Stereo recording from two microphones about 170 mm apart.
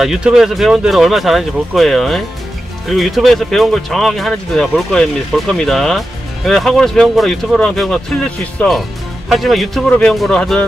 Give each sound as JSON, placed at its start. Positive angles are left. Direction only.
{"t": 0.0, "sound": "speech", "side_deg": -5}